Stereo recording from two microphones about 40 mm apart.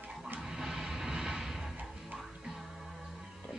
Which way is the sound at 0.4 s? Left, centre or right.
Centre.